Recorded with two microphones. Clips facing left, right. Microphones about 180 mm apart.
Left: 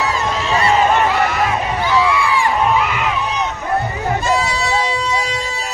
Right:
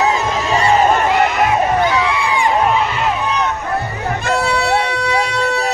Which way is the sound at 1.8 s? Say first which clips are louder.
Even; 20° right (ahead or behind).